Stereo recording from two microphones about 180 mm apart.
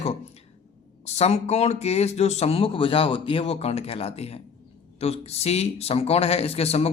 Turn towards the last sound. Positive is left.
turn(degrees=35)  # may be behind; listen again after turning